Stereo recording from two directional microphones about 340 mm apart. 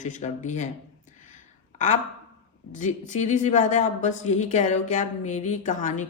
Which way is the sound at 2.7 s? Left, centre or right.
Left.